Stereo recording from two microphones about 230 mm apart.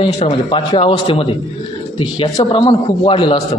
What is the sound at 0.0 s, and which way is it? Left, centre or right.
A man's voice, left.